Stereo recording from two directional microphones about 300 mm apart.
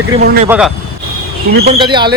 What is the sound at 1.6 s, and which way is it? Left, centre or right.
Speech, centre.